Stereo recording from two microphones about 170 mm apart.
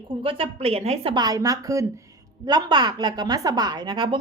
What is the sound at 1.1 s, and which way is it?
A woman's voice, 25° right (ahead or behind).